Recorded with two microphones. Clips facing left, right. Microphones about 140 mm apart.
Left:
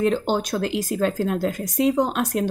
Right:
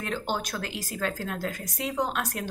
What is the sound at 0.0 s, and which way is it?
Speech, 25° left (ahead or behind).